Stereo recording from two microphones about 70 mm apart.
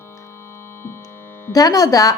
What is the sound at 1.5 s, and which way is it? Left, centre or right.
Speech, left.